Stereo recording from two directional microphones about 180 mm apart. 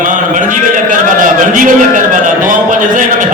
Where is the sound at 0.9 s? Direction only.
45° right (ahead or behind).